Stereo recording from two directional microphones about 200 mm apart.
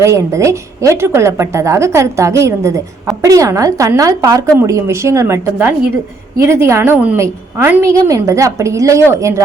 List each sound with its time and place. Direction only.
0.0 s a woman's voice: 15° right (ahead or behind)